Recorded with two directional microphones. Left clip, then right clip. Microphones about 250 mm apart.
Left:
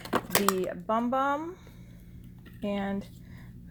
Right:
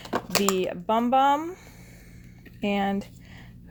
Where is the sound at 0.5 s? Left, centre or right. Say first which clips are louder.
Right 4 dB; right.